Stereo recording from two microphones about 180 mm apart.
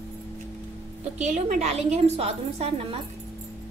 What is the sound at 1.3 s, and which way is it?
A woman's voice, 40° right (ahead or behind).